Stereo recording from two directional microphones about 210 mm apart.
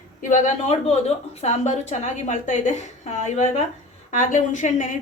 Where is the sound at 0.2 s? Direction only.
35° left (ahead or behind).